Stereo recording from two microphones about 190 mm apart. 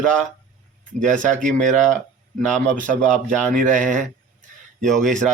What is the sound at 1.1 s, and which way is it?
Speech, 40° right (ahead or behind).